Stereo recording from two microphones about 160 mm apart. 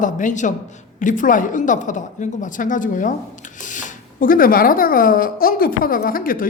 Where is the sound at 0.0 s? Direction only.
50° left (ahead or behind).